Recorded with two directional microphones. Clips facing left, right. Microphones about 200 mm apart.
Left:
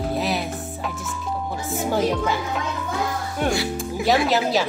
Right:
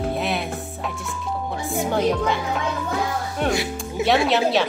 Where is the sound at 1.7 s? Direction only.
5° left (ahead or behind).